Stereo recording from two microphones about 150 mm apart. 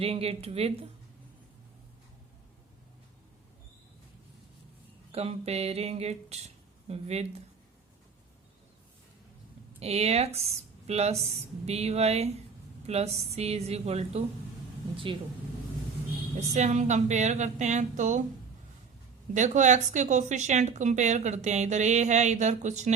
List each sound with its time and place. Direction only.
0.0 s speech: 40° right (ahead or behind)
5.1 s speech: 40° right (ahead or behind)
9.8 s speech: 45° right (ahead or behind)
16.6 s speech: 50° right (ahead or behind)
19.3 s speech: 55° right (ahead or behind)